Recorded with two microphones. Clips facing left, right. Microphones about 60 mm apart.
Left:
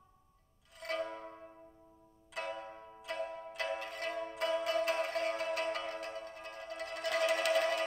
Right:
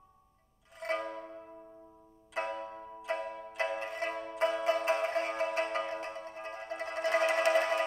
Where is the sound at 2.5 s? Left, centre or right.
Centre.